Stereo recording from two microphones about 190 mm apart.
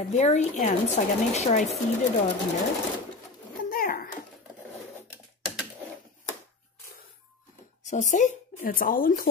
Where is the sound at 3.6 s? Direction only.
50° left (ahead or behind).